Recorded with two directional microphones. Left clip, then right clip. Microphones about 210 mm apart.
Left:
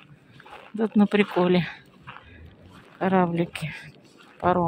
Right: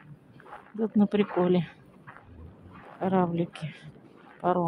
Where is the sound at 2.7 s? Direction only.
10° left (ahead or behind).